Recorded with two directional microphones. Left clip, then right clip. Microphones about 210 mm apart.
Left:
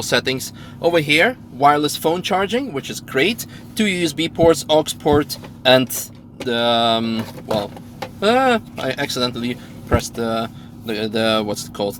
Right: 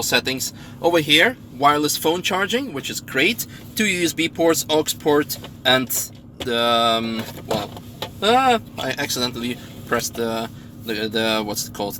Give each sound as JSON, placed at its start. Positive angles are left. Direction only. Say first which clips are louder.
{"t": 0.0, "sound": "speech", "louder": "left 1 dB", "side_deg": 25}
{"t": 8.2, "sound": "speech", "louder": "left 1 dB", "side_deg": 25}